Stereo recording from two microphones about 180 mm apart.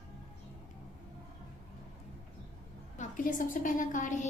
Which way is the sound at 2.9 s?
50° left (ahead or behind).